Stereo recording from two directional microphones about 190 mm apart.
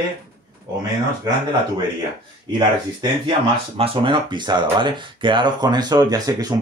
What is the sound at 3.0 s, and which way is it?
Speech, 25° right (ahead or behind).